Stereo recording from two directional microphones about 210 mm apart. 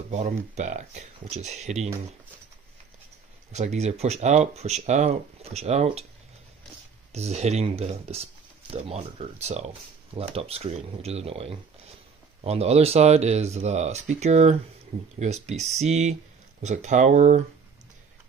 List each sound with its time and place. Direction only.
0.1 s speech: 35° right (ahead or behind)
3.5 s speech: 35° right (ahead or behind)
7.1 s speech: 30° right (ahead or behind)